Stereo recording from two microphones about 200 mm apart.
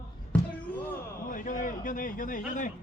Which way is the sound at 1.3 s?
40° left (ahead or behind).